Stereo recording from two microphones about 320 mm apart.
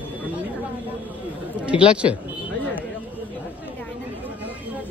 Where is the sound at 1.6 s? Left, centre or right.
Centre.